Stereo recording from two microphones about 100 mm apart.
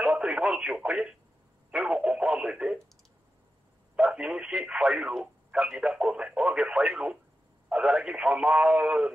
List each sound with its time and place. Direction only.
0.0 s speech: 10° right (ahead or behind)
3.9 s speech: 10° right (ahead or behind)